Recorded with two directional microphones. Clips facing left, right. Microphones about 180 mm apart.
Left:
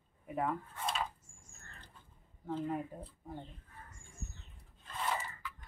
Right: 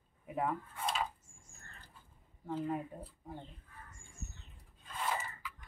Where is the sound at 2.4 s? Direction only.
5° right (ahead or behind).